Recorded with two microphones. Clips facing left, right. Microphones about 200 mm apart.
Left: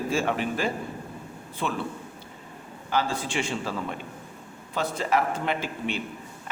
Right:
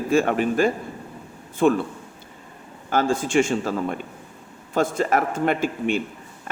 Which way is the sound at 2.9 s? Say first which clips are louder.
Right 7 dB; 45° right (ahead or behind).